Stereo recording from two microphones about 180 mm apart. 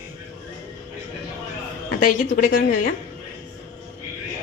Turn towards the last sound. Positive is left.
turn(degrees=50)  # may be behind; listen again after turning